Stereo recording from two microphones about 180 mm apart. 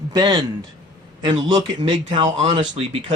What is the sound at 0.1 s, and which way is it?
Speech, 25° right (ahead or behind).